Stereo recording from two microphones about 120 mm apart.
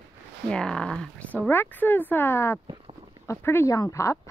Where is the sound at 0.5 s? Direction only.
5° left (ahead or behind).